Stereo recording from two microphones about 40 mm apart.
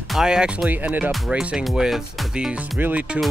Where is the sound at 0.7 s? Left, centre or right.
Right.